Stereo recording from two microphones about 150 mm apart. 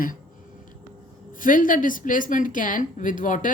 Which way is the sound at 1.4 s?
65° left (ahead or behind).